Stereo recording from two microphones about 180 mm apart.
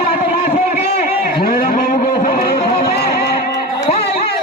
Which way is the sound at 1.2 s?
55° left (ahead or behind).